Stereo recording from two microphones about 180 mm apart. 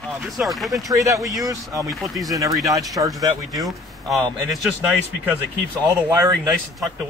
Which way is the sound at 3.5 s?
Centre (ahead or behind).